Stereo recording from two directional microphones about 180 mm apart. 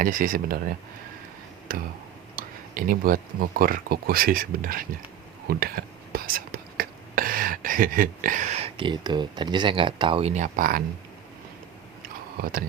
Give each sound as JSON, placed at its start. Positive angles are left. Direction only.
{"t": 0.0, "sound": "speech", "side_deg": -50}
{"t": 1.7, "sound": "speech", "side_deg": -50}
{"t": 12.4, "sound": "speech", "side_deg": -55}